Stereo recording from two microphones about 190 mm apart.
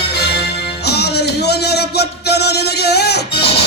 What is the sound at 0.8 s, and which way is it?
Speech, 60° left (ahead or behind).